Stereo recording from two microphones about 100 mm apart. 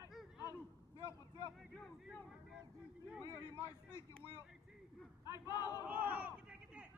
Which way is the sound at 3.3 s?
30° left (ahead or behind).